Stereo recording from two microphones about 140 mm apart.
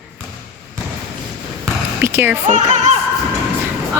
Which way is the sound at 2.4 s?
55° right (ahead or behind).